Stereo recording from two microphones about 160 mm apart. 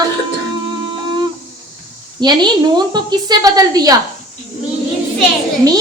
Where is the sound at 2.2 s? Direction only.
25° right (ahead or behind).